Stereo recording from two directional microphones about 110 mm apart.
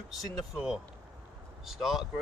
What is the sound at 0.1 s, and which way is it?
Speech, 5° right (ahead or behind).